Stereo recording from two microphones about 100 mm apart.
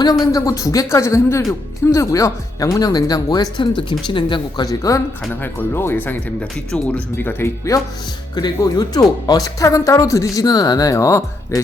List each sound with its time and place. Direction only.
0.0 s speech: 40° left (ahead or behind)
3.6 s a woman's voice: 50° left (ahead or behind); by 5.0 s 35° left (ahead or behind)
5.3 s speech: 20° left (ahead or behind)
8.4 s speech: 40° left (ahead or behind)